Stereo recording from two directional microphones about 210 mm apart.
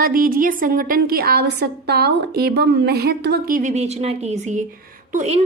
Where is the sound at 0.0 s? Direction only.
40° right (ahead or behind).